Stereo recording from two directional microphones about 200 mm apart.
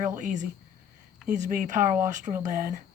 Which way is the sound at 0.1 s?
40° right (ahead or behind).